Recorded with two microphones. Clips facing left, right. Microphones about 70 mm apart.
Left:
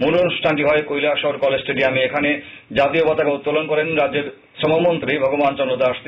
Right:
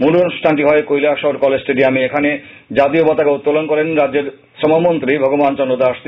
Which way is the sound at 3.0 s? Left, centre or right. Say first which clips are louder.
Right 5 dB; centre.